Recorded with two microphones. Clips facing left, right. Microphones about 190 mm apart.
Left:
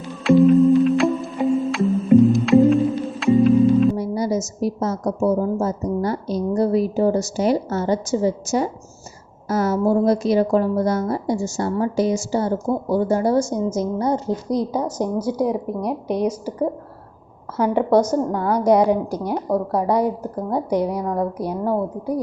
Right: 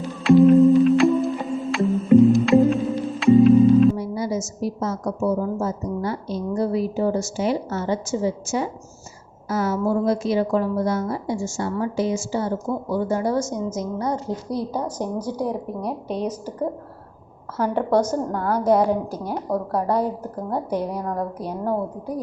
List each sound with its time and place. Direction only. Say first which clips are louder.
0.2 s music: even; centre (ahead or behind)
3.9 s a woman's voice: left 3 dB; 40° left (ahead or behind)
14.5 s a woman's voice: left 4 dB; 15° left (ahead or behind)